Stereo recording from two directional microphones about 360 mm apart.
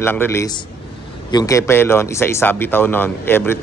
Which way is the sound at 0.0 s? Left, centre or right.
Centre.